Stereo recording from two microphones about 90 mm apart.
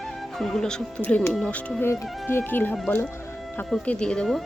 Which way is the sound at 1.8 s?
25° left (ahead or behind).